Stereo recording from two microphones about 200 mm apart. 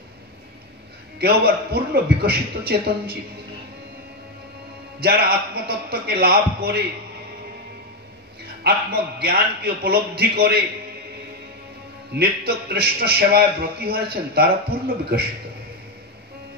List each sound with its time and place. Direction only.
1.2 s a man's voice: 50° right (ahead or behind)
5.0 s a man's voice: 50° right (ahead or behind)
8.6 s a man's voice: 50° right (ahead or behind)
12.1 s a man's voice: 50° right (ahead or behind)